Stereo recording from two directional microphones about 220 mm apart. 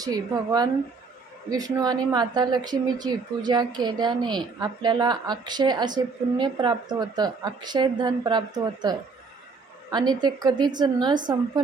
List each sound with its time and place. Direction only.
0.0 s speech: 15° right (ahead or behind)